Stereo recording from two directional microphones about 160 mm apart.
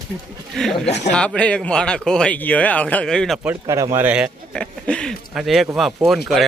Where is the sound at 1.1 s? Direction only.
5° left (ahead or behind).